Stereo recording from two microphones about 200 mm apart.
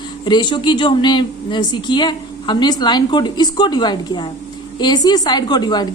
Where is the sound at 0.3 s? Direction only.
20° left (ahead or behind).